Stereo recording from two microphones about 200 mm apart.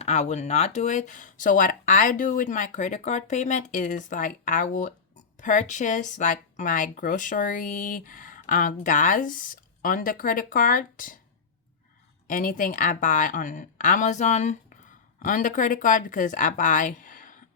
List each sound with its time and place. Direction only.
0.0 s speech: 35° left (ahead or behind)
12.3 s speech: 40° left (ahead or behind)